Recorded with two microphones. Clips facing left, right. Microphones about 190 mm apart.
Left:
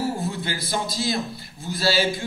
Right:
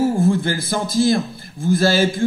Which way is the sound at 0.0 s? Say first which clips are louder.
Right 10 dB; 50° right (ahead or behind).